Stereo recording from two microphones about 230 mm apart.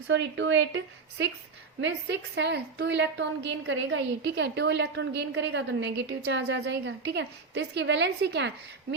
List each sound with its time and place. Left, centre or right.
0.1 s a woman's voice: right
1.8 s a woman's voice: right